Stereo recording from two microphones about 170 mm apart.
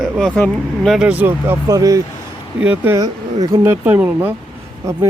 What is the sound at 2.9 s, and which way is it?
Speech, 20° right (ahead or behind).